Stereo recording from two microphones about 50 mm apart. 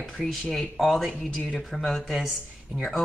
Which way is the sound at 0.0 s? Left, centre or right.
Centre.